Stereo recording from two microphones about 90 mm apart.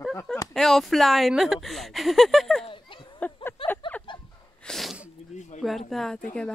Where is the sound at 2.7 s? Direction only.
70° left (ahead or behind).